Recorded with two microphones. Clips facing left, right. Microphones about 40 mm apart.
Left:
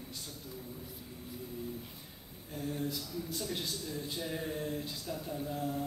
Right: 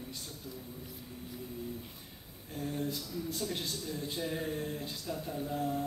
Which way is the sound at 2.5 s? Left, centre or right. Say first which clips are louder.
Right 1 dB; right.